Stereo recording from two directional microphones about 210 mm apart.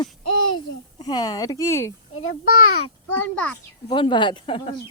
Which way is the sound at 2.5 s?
90° left.